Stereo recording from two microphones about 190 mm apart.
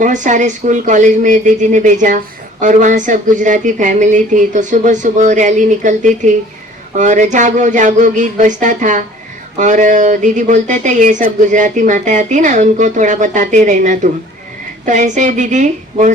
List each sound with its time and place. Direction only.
0.0 s speech: 40° right (ahead or behind)